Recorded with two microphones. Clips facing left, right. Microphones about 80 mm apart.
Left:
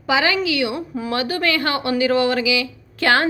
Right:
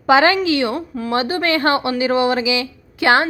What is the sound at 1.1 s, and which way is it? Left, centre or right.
A woman's voice, right.